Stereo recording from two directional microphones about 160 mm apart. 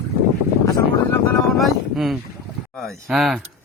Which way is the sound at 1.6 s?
Centre (ahead or behind).